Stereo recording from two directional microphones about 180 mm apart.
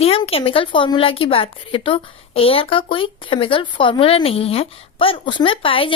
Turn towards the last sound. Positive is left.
turn(degrees=30)  # may be behind; listen again after turning